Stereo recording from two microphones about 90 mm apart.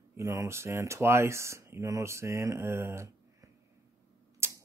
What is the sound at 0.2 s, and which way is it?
Speech, 35° right (ahead or behind).